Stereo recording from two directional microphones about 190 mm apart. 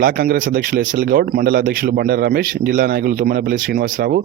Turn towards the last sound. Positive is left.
turn(degrees=-45)  # may be behind; listen again after turning